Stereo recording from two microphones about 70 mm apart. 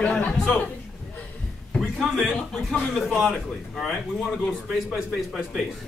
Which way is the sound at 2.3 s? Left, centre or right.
Centre.